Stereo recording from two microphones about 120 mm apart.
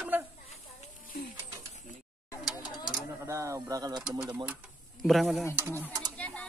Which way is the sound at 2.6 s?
35° left (ahead or behind).